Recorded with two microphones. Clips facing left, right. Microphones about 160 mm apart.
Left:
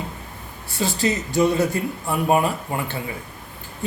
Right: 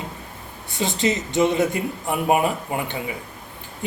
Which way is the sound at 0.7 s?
20° right (ahead or behind).